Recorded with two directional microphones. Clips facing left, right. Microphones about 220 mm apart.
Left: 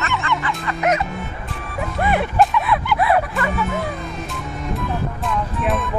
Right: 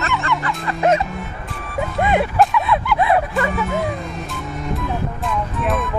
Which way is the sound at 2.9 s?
20° right (ahead or behind).